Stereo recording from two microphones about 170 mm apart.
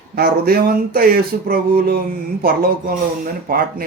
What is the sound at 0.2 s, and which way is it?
Speech, 65° right (ahead or behind).